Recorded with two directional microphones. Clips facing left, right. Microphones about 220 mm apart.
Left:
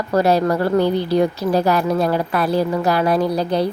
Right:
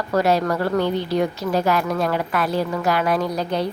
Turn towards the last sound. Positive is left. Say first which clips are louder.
# left 4 dB
turn(degrees=35)  # may be behind; listen again after turning